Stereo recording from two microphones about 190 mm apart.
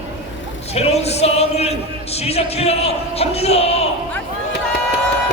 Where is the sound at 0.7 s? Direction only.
35° left (ahead or behind).